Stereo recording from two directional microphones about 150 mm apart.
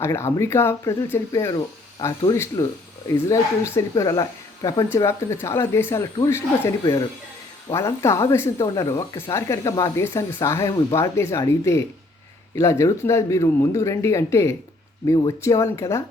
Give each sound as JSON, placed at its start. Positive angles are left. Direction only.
{"t": 0.0, "sound": "speech", "side_deg": 15}